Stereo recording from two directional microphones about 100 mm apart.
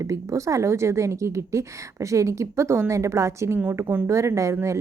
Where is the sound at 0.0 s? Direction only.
30° right (ahead or behind).